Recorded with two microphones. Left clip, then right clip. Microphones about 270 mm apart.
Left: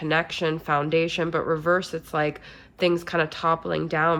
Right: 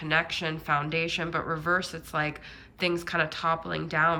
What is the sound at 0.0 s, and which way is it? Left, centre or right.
A woman's voice, centre.